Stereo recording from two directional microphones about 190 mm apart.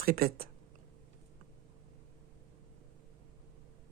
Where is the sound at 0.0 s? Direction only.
50° right (ahead or behind).